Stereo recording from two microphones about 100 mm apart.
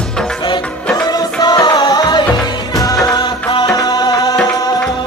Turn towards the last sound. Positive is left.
turn(degrees=40)  # may be behind; listen again after turning